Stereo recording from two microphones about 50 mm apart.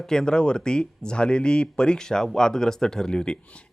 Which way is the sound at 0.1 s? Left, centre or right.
Centre.